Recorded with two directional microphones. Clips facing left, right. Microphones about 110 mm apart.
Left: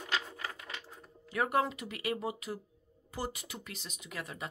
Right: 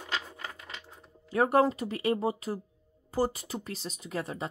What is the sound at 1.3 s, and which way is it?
Speech, 40° right (ahead or behind).